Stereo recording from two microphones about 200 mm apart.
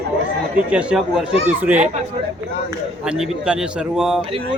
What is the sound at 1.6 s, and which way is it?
Speech, 5° right (ahead or behind).